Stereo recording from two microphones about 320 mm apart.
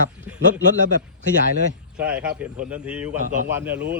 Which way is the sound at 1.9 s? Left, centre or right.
Centre.